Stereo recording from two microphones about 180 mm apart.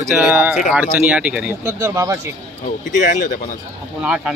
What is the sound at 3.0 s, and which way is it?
Speech, 50° left (ahead or behind).